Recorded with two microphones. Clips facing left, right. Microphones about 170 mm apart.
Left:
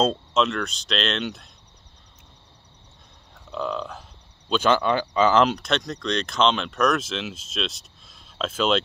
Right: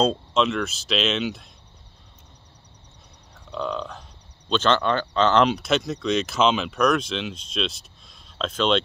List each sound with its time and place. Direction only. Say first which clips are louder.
0.0 s speech: right 1 dB; centre (ahead or behind)
3.5 s speech: even; 5° left (ahead or behind)